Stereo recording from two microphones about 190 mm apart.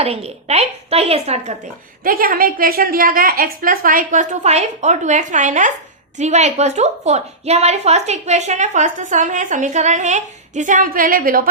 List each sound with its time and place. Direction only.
0.0 s a woman's voice: 35° right (ahead or behind)
2.0 s a woman's voice: 50° right (ahead or behind)